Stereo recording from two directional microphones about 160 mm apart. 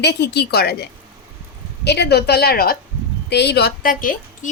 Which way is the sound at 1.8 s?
90° left.